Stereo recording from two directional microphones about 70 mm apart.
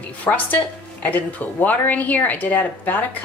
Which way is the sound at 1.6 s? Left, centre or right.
Left.